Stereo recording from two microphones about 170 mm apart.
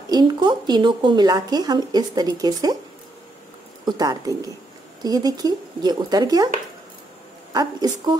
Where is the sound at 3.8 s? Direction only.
20° right (ahead or behind).